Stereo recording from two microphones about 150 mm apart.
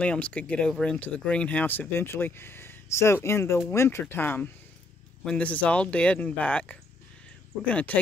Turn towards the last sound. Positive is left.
turn(degrees=10)  # may be behind; listen again after turning